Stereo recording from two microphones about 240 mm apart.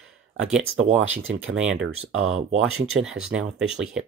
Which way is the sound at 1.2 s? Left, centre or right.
Right.